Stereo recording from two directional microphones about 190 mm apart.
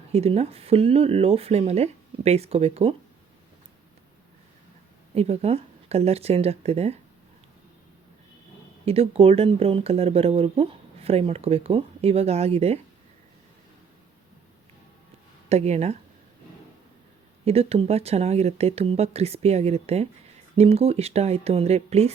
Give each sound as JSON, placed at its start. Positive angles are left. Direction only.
{"t": 0.1, "sound": "speech", "side_deg": -30}
{"t": 5.1, "sound": "speech", "side_deg": -35}
{"t": 8.8, "sound": "speech", "side_deg": -30}
{"t": 15.4, "sound": "speech", "side_deg": -35}
{"t": 17.4, "sound": "speech", "side_deg": -30}